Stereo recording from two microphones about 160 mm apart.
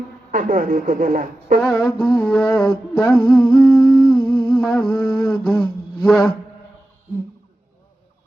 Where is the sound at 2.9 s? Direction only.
Centre (ahead or behind).